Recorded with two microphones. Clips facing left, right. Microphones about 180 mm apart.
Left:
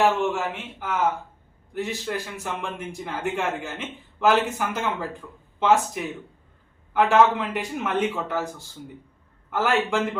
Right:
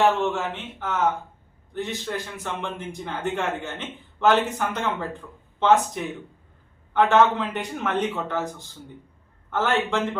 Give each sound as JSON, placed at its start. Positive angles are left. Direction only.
{"t": 0.0, "sound": "a man's voice", "side_deg": 5}